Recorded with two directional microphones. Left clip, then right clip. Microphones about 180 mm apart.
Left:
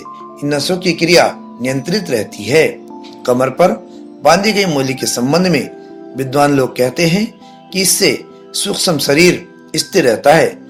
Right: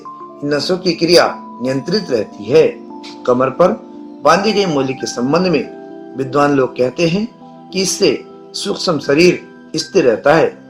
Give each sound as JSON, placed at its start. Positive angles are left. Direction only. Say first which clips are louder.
{"t": 0.4, "sound": "speech", "louder": "left 1 dB", "side_deg": 40}